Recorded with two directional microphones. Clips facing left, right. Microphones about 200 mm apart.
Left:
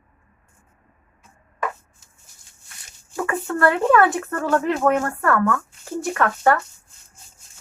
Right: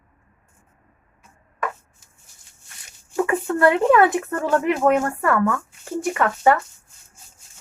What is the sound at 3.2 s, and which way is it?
Speech, 15° right (ahead or behind).